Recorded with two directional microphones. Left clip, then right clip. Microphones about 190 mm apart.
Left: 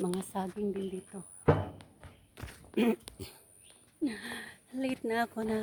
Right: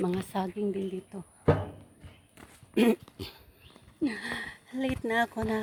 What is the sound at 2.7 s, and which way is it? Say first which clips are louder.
Speech: right 5 dB; 50° right (ahead or behind).